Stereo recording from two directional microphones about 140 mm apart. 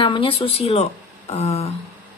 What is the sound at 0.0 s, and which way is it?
Speech, 35° left (ahead or behind).